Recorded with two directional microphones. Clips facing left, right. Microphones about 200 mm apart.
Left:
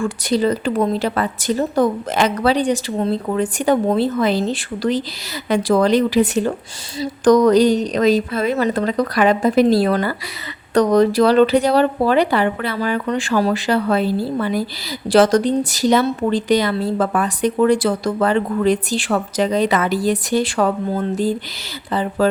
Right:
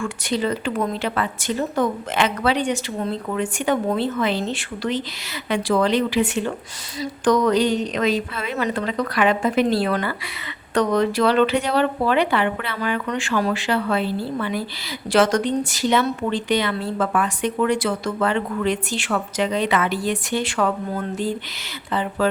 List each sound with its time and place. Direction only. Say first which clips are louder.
0.0 s speech: left 5 dB; 35° left (ahead or behind)